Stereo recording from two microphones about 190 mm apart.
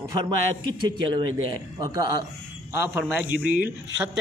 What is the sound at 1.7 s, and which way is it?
Speech, 20° right (ahead or behind).